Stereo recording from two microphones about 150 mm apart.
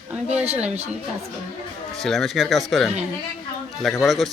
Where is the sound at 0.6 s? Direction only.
45° right (ahead or behind).